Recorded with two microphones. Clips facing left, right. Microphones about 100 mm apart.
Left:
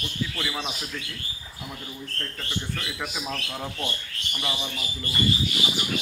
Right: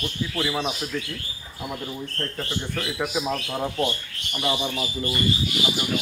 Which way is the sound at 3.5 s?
30° right (ahead or behind).